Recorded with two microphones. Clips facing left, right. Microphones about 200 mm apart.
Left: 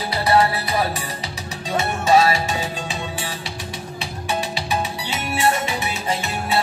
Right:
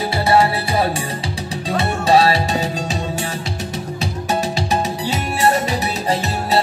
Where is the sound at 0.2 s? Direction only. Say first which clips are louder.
Right 2 dB; 25° right (ahead or behind).